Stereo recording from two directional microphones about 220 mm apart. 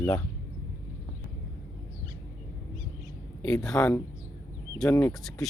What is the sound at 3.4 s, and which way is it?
Speech, 5° left (ahead or behind).